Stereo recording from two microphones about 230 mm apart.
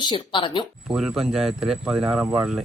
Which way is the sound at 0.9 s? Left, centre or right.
Centre.